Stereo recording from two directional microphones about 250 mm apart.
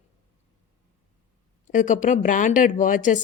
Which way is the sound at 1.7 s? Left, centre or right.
Left.